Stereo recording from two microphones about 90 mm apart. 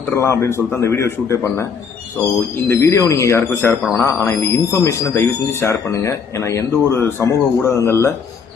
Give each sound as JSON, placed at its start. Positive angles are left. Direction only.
{"t": 0.1, "sound": "speech", "side_deg": 30}
{"t": 2.6, "sound": "speech", "side_deg": 30}